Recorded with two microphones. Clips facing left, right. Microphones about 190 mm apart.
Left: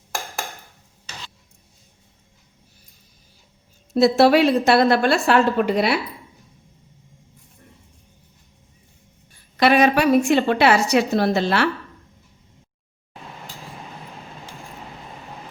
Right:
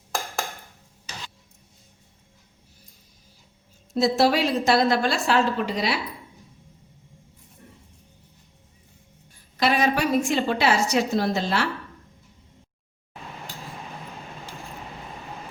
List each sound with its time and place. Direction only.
3.9 s a woman's voice: 65° left (ahead or behind)
9.6 s a woman's voice: 65° left (ahead or behind)